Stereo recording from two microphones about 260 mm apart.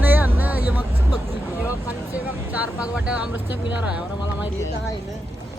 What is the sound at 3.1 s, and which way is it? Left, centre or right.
Speech, centre.